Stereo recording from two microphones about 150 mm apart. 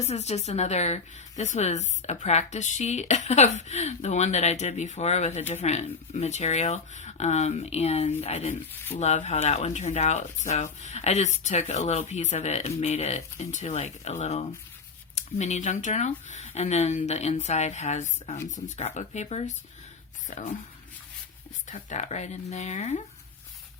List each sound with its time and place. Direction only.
0.0 s a woman's voice: 45° left (ahead or behind)
21.7 s a woman's voice: 50° left (ahead or behind)